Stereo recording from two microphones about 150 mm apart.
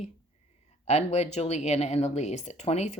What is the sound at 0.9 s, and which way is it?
Speech, 45° left (ahead or behind).